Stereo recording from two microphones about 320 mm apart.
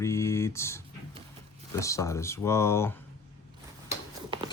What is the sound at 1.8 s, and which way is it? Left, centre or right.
Speech, centre.